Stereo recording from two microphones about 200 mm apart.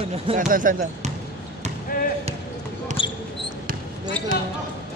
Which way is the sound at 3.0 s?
25° left (ahead or behind).